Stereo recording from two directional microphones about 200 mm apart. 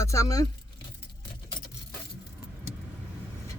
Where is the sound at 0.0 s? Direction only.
15° left (ahead or behind).